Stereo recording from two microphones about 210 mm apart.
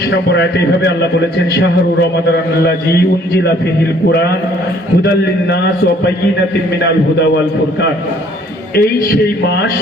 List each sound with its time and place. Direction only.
0.3 s a man's voice: 55° left (ahead or behind)
4.1 s a man's voice: 50° left (ahead or behind)
8.7 s a man's voice: 45° left (ahead or behind)